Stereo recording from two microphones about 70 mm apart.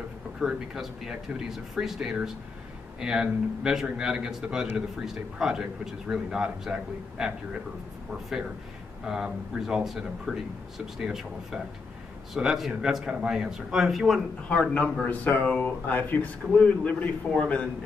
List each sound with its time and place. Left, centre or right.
0.4 s a man's voice: centre
15.0 s a man's voice: left